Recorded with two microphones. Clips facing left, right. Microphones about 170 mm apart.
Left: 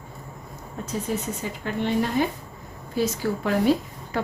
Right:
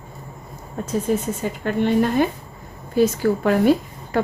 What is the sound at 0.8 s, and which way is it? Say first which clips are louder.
A woman's voice: right 7 dB; 50° right (ahead or behind).